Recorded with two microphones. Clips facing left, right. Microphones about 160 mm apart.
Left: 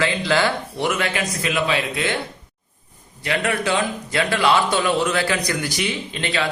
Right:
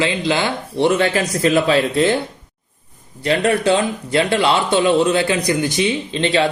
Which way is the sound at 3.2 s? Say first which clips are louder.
Right 6 dB; 30° right (ahead or behind).